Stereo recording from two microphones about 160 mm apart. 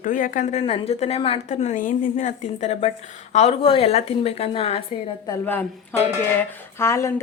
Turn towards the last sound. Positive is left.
turn(degrees=15)  # may be behind; listen again after turning